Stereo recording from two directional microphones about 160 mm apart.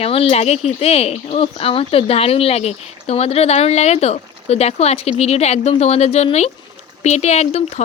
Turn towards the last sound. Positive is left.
turn(degrees=40)  # may be behind; listen again after turning